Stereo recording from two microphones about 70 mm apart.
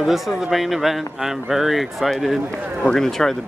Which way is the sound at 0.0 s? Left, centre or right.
Centre.